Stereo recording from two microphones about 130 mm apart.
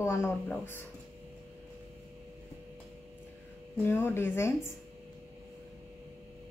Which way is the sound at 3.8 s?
20° left (ahead or behind).